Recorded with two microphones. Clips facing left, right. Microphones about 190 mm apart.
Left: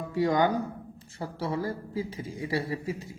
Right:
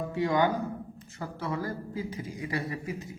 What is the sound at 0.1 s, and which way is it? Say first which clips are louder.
A woman's voice: left 2 dB; 40° left (ahead or behind).